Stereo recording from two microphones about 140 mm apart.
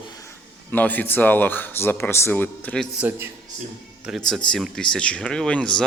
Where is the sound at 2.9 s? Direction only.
15° right (ahead or behind).